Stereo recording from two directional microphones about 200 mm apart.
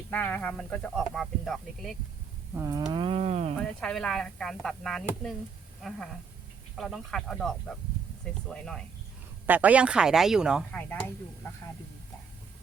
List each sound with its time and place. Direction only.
0.1 s speech: 10° left (ahead or behind)
2.6 s a sound: 20° right (ahead or behind)
3.6 s speech: 5° left (ahead or behind)
6.7 s speech: centre (ahead or behind)